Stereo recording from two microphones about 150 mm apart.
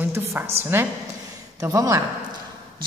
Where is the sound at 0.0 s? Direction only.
15° right (ahead or behind).